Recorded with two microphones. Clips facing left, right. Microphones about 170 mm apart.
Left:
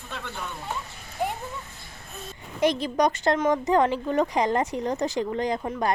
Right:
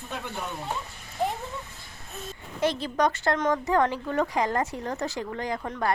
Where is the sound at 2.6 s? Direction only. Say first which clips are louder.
Left 3 dB; 15° left (ahead or behind).